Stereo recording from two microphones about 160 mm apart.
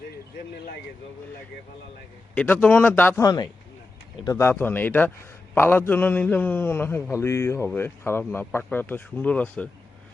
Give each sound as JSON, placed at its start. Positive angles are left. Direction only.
{"t": 2.3, "sound": "speech", "side_deg": 10}
{"t": 3.2, "sound": "speech", "side_deg": 25}